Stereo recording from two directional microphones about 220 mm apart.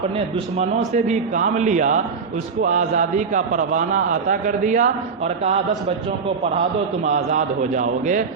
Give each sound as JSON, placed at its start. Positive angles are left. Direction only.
{"t": 0.3, "sound": "a man's voice", "side_deg": -30}